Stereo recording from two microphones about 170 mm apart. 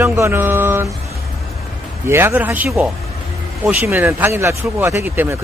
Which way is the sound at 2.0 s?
15° right (ahead or behind).